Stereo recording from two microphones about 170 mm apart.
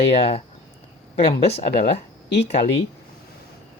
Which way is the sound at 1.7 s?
70° left (ahead or behind).